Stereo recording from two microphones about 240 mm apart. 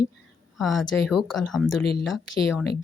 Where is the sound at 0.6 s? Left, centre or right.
Centre.